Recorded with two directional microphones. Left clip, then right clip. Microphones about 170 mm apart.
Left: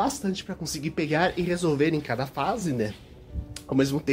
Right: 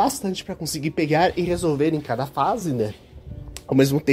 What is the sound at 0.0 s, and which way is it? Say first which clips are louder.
Speech: right 5 dB; 30° right (ahead or behind).